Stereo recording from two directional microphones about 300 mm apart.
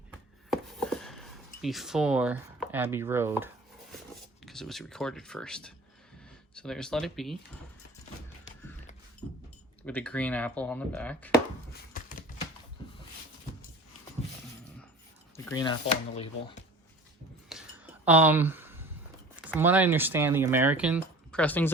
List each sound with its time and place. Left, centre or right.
0.5 s a sound: centre
4.1 s speech: centre
9.8 s speech: centre
15.4 s speech: centre
17.5 s a sound: centre
19.5 s speech: centre